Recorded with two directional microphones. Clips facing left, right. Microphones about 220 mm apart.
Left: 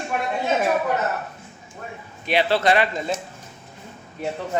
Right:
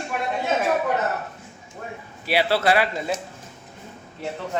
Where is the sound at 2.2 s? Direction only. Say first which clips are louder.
Left 1 dB; 5° right (ahead or behind).